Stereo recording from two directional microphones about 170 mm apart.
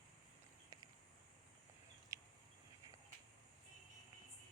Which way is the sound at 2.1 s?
20° right (ahead or behind).